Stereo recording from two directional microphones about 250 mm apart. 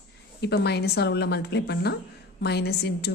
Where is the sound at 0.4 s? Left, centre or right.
Left.